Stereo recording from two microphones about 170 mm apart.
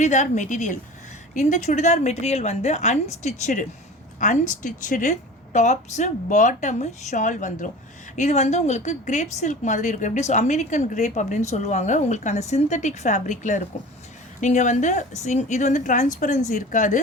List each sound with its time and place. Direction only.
0.0 s a woman's voice: 45° left (ahead or behind)